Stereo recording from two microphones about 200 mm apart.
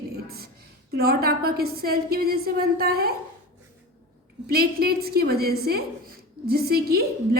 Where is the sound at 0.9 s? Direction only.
50° right (ahead or behind).